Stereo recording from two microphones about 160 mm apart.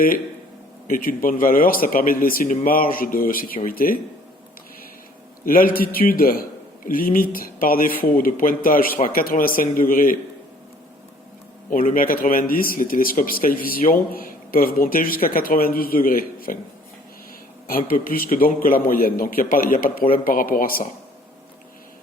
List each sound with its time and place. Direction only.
0.9 s speech: 60° left (ahead or behind)
5.5 s speech: 65° left (ahead or behind)
11.7 s speech: 55° left (ahead or behind)
17.7 s speech: 65° left (ahead or behind)